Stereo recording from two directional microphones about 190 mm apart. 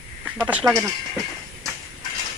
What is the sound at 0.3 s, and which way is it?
Speech, 10° right (ahead or behind).